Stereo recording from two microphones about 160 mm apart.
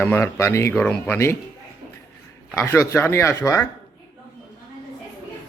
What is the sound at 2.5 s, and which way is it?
Speech, 15° left (ahead or behind).